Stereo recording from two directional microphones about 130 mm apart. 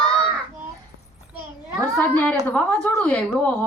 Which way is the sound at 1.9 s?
10° left (ahead or behind).